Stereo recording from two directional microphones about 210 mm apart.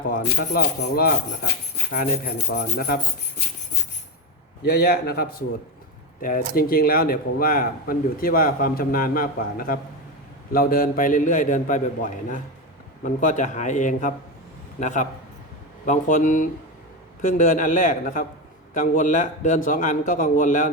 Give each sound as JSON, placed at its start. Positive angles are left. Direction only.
{"t": 0.0, "sound": "a man's voice", "side_deg": 45}
{"t": 4.6, "sound": "a man's voice", "side_deg": 50}
{"t": 6.5, "sound": "a man's voice", "side_deg": 45}